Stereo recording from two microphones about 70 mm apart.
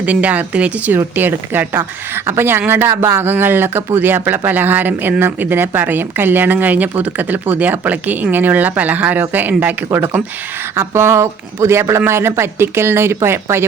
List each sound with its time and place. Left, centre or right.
0.0 s a woman's voice: centre
9.9 s speech: right